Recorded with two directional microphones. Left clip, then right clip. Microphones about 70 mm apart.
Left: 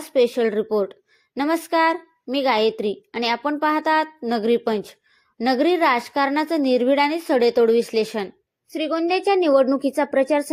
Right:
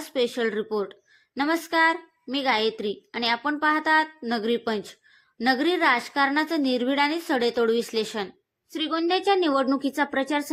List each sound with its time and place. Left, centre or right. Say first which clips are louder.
0.0 s a woman's voice: left 6 dB; left
8.7 s a woman's voice: left 3 dB; centre